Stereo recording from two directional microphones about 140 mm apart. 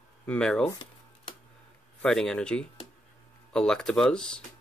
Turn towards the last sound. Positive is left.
turn(degrees=5)  # may be behind; listen again after turning